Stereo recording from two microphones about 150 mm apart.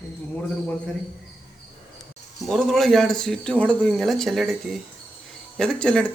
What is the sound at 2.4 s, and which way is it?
Speech, centre (ahead or behind).